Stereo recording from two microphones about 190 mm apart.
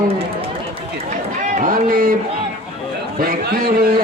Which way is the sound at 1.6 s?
45° right (ahead or behind).